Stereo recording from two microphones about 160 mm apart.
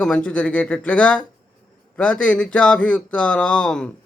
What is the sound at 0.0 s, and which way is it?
Speech, 5° left (ahead or behind).